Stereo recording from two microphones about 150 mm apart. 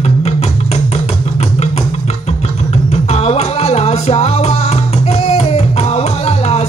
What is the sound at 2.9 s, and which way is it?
Music, 45° left (ahead or behind).